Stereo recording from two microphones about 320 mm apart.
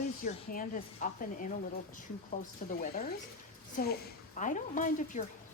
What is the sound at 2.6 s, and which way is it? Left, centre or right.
Speech, left.